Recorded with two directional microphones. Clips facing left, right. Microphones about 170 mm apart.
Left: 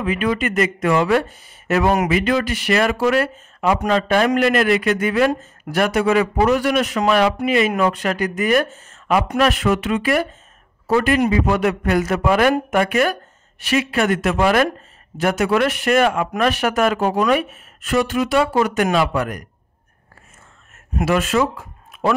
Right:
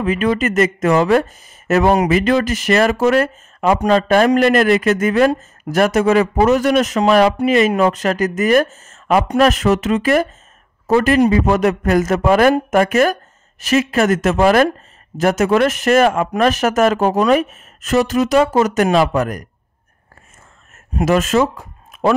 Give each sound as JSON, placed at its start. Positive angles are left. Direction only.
{"t": 0.0, "sound": "speech", "side_deg": -40}
{"t": 21.0, "sound": "speech", "side_deg": -40}